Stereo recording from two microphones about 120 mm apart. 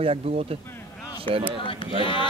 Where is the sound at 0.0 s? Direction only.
55° right (ahead or behind).